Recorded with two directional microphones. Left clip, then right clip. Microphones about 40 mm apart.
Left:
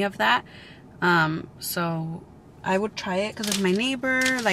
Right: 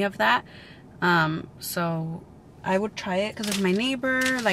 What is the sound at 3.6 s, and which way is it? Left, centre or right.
Speech, centre.